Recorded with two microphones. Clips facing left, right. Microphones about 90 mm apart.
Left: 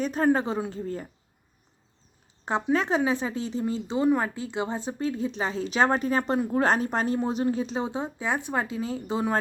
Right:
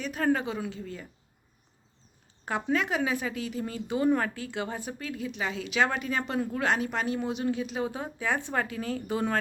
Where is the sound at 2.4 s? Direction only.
30° left (ahead or behind).